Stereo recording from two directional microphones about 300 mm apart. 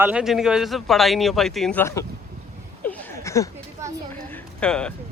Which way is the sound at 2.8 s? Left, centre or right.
Centre.